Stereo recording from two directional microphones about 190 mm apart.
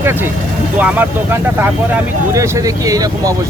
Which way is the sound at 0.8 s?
10° right (ahead or behind).